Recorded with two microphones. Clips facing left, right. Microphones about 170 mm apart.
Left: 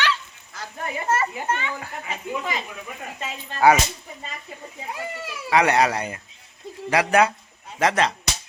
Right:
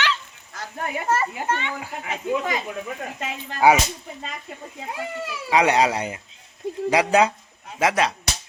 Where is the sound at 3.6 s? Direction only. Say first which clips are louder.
Even; 15° right (ahead or behind).